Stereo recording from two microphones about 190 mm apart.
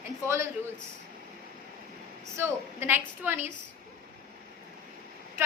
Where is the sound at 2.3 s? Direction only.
10° right (ahead or behind).